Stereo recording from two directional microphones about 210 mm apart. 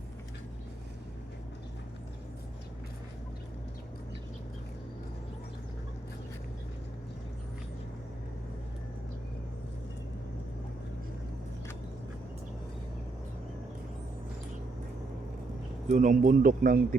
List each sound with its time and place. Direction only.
15.9 s a man's voice: 35° right (ahead or behind)